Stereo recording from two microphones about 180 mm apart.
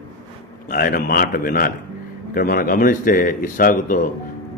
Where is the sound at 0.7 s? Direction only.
55° left (ahead or behind).